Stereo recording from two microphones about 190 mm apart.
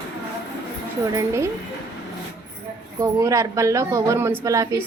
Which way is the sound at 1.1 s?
15° right (ahead or behind).